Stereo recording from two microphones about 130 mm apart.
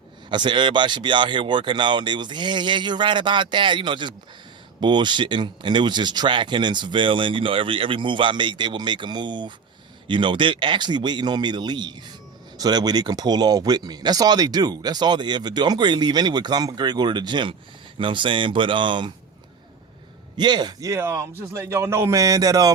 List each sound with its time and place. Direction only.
0.3 s speech: 35° right (ahead or behind)
20.3 s a man's voice: 35° right (ahead or behind)